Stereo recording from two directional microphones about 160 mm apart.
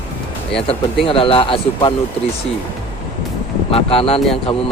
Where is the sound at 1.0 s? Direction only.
35° left (ahead or behind).